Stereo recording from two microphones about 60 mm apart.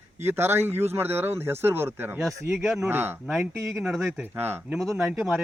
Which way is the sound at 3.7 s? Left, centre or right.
Centre.